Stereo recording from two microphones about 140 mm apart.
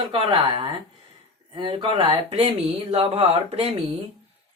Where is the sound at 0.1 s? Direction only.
30° right (ahead or behind).